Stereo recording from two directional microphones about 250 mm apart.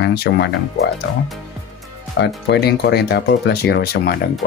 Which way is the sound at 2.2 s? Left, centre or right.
Left.